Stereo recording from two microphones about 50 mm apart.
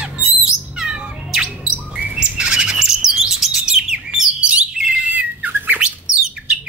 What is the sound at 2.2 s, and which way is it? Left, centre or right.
Chirp, centre.